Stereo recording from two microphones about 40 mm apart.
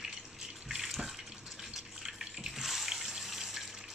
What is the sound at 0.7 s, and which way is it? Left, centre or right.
Water tap, centre.